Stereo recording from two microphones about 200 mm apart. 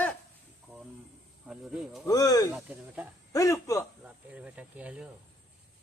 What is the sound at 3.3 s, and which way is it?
Speech, 15° left (ahead or behind).